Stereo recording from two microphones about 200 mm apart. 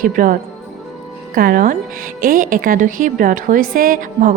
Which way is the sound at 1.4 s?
45° right (ahead or behind).